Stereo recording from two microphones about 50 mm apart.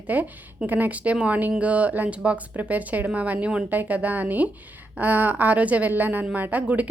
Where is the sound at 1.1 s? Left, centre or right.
Right.